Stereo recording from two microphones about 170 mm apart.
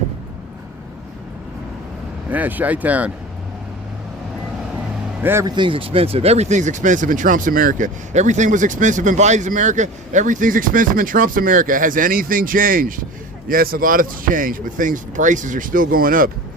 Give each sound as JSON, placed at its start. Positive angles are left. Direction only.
{"t": 2.3, "sound": "speech", "side_deg": -10}
{"t": 5.2, "sound": "speech", "side_deg": -15}